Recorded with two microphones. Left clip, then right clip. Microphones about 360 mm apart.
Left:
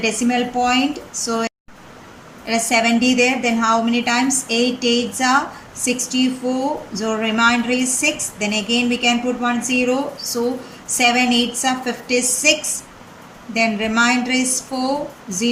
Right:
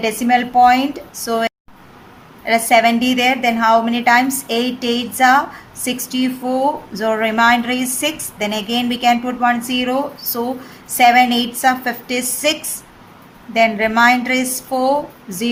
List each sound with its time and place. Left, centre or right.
0.0 s speech: centre
2.5 s speech: centre
10.9 s speech: centre